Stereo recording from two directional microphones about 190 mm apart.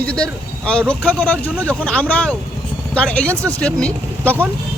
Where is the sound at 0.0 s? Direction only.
5° left (ahead or behind).